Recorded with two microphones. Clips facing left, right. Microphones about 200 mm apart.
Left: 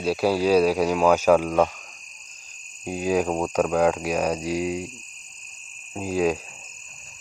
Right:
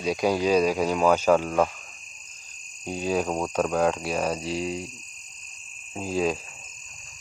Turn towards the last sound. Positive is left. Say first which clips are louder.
# left 3 dB
turn(degrees=10)  # may be behind; listen again after turning